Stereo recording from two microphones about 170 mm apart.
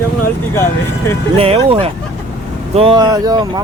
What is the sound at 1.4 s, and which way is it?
Speech, 35° right (ahead or behind).